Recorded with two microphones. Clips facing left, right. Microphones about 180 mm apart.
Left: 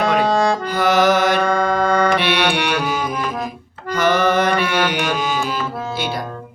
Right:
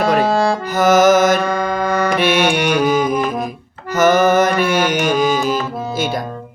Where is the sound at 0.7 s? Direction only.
45° right (ahead or behind).